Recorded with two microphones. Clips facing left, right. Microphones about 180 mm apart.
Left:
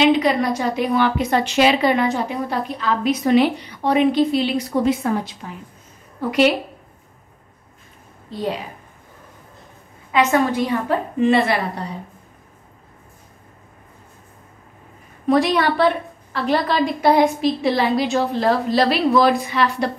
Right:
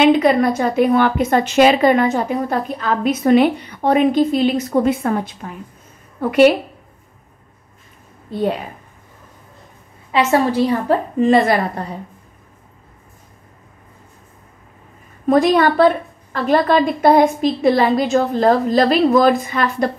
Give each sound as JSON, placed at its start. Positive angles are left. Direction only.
{"t": 0.0, "sound": "a woman's voice", "side_deg": -50}
{"t": 8.3, "sound": "a woman's voice", "side_deg": -55}
{"t": 10.1, "sound": "a woman's voice", "side_deg": -35}
{"t": 15.2, "sound": "a woman's voice", "side_deg": -40}